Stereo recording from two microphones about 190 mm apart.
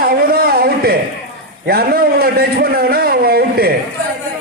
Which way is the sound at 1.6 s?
55° right (ahead or behind).